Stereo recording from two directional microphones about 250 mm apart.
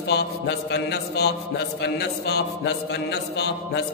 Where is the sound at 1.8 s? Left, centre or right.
Left.